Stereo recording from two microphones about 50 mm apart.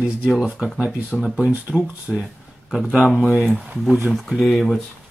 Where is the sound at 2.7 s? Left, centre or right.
Centre.